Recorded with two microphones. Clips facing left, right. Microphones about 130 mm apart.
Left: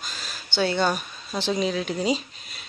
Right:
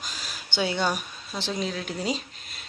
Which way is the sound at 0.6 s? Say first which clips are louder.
Left 3 dB; 10° right (ahead or behind).